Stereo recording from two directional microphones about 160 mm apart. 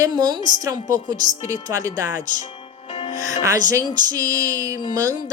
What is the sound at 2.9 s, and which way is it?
Music, 45° left (ahead or behind).